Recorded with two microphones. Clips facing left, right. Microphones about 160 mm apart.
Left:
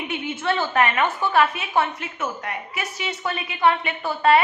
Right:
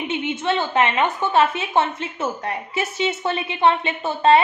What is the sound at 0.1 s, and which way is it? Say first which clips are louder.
A woman's voice: right 2 dB; 20° right (ahead or behind).